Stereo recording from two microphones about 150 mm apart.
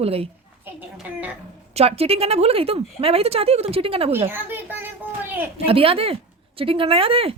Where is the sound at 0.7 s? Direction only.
10° right (ahead or behind).